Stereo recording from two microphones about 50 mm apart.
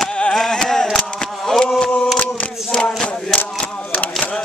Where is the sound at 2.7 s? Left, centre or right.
Centre.